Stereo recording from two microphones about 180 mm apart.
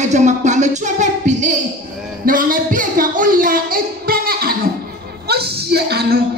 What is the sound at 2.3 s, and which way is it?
Speech, 50° right (ahead or behind).